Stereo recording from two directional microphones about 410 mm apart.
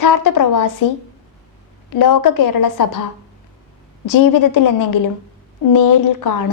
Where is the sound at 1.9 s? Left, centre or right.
Left.